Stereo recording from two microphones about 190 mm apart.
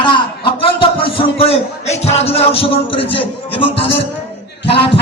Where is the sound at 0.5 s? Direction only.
30° left (ahead or behind).